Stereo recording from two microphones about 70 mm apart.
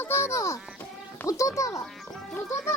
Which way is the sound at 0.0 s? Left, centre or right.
Left.